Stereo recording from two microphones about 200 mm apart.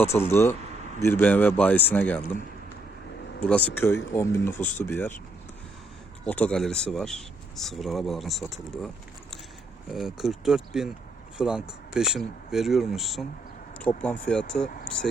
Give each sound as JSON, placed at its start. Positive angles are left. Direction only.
{"t": 0.3, "sound": "speech", "side_deg": 15}
{"t": 3.4, "sound": "speech", "side_deg": 5}
{"t": 6.2, "sound": "speech", "side_deg": 5}
{"t": 9.9, "sound": "speech", "side_deg": 0}